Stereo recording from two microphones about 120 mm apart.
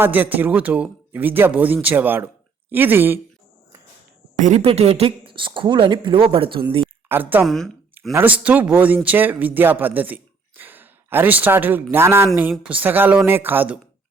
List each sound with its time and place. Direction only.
0.0 s speech: 15° right (ahead or behind)
4.4 s speech: 90° right
4.6 s speech: 55° right (ahead or behind)
7.1 s speech: 15° right (ahead or behind)
7.4 s a woman's voice: centre (ahead or behind)
8.1 s speech: 15° right (ahead or behind)